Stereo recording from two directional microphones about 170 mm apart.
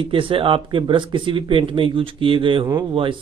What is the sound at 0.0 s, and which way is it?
Speech, 30° right (ahead or behind).